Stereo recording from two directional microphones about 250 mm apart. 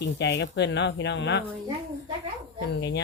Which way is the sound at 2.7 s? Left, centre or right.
Left.